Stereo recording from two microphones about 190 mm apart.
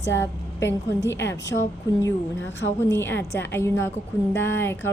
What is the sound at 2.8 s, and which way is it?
Speech, 15° left (ahead or behind).